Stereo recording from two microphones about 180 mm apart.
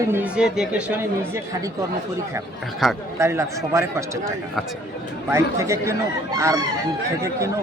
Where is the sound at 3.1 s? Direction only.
15° right (ahead or behind).